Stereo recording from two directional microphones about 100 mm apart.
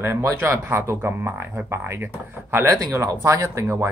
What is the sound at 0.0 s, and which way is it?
Speech, 25° right (ahead or behind).